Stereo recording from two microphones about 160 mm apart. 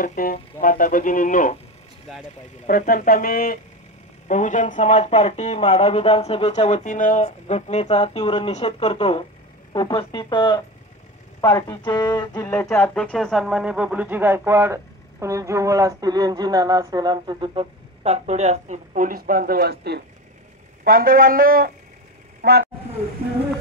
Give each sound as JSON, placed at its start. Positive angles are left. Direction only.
{"t": 0.0, "sound": "speech", "side_deg": 60}
{"t": 2.1, "sound": "speech", "side_deg": 0}
{"t": 2.6, "sound": "speech", "side_deg": 55}
{"t": 4.3, "sound": "speech", "side_deg": 50}
{"t": 9.7, "sound": "speech", "side_deg": 25}
{"t": 20.8, "sound": "speech", "side_deg": -65}
{"t": 22.4, "sound": "speech", "side_deg": -90}